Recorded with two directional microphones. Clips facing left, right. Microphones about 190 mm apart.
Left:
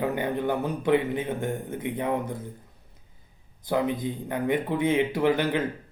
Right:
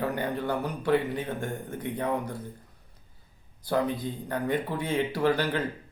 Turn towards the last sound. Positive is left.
turn(degrees=20)  # may be behind; listen again after turning